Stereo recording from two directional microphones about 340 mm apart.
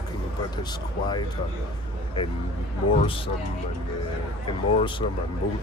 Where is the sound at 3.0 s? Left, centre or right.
Centre.